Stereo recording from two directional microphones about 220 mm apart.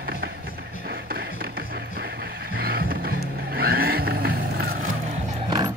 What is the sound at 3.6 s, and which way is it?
Vehicle, 45° right (ahead or behind).